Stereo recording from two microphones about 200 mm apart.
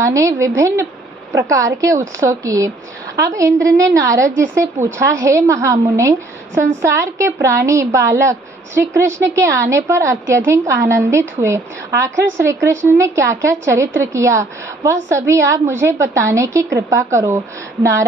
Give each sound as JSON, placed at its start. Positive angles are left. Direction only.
{"t": 0.0, "sound": "a woman's voice", "side_deg": -15}